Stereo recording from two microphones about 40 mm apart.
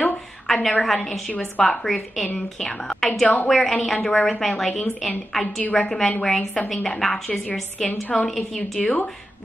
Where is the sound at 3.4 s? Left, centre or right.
Centre.